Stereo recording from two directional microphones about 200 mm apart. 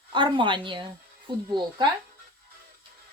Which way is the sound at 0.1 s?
25° right (ahead or behind).